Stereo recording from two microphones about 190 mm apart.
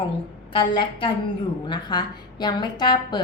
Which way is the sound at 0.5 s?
25° left (ahead or behind).